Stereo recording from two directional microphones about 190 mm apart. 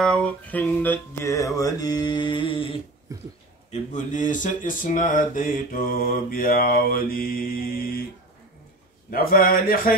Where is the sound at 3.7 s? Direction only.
40° left (ahead or behind).